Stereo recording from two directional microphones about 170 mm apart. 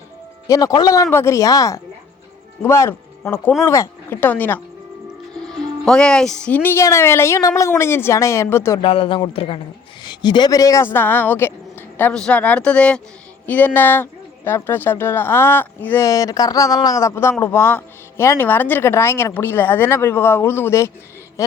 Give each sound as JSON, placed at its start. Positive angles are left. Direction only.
{"t": 0.4, "sound": "a woman's voice", "side_deg": 20}
{"t": 8.8, "sound": "a man's voice", "side_deg": 35}